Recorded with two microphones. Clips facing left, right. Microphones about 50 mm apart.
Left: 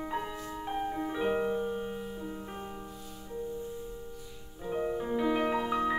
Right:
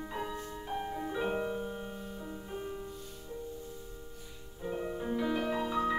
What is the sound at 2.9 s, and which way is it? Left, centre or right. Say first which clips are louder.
Music: even; centre.